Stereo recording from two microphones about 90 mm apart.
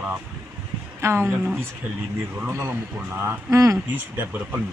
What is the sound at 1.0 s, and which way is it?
Speech, 30° right (ahead or behind).